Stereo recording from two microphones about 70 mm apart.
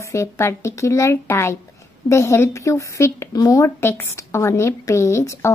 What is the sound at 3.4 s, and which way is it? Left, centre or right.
Speech, left.